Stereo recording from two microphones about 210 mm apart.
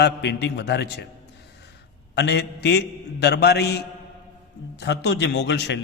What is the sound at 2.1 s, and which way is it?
A man's voice, 55° left (ahead or behind).